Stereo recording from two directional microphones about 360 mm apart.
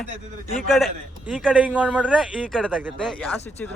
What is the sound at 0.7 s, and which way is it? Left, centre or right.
A man's voice, centre.